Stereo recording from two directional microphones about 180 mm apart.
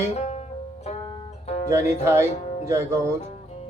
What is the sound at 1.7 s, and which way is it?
Speech, 15° right (ahead or behind).